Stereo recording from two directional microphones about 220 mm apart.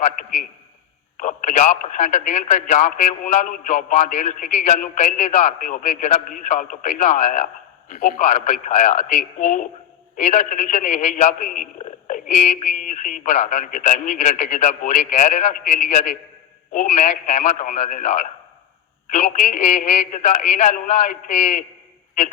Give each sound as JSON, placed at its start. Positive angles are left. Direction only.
{"t": 0.0, "sound": "speech", "side_deg": 35}